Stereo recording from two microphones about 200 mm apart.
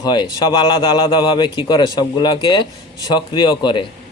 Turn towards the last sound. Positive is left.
turn(degrees=25)  # may be behind; listen again after turning